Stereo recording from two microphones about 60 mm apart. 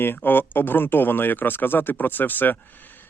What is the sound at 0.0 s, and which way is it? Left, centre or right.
Speech, left.